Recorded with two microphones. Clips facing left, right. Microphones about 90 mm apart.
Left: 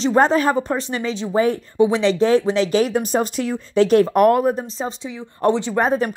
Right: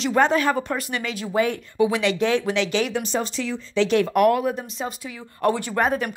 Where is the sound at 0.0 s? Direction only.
35° left (ahead or behind).